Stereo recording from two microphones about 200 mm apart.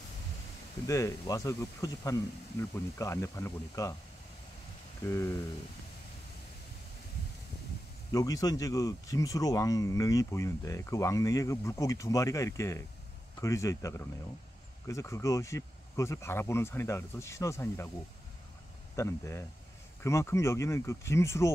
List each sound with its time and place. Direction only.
0.8 s speech: 15° left (ahead or behind)
5.0 s speech: 15° left (ahead or behind)
8.1 s speech: 15° left (ahead or behind)
18.9 s speech: 15° left (ahead or behind)